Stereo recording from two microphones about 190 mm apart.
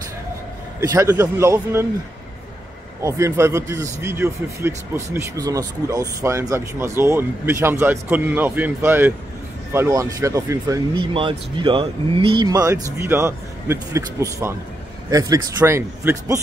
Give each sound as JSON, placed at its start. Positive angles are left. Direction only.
{"t": 0.7, "sound": "speech", "side_deg": -15}
{"t": 3.0, "sound": "speech", "side_deg": -15}
{"t": 11.1, "sound": "speech", "side_deg": -25}